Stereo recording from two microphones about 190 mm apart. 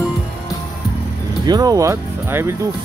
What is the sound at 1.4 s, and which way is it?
Speech, 20° right (ahead or behind).